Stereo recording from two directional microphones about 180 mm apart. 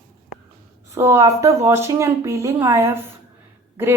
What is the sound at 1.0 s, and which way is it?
Speech, 15° right (ahead or behind).